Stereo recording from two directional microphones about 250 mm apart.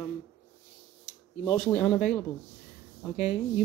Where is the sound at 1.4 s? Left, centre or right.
Centre.